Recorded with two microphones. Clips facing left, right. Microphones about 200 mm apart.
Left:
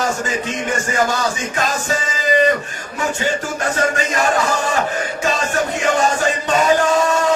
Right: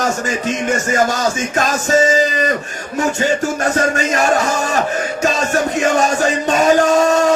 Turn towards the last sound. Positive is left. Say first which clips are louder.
# right 3 dB
turn(degrees=-40)  # may be behind; listen again after turning